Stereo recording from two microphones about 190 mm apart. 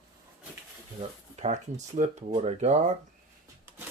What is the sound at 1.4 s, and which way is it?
Speech, 40° right (ahead or behind).